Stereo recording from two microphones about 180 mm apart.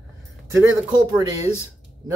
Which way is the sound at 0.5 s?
15° right (ahead or behind).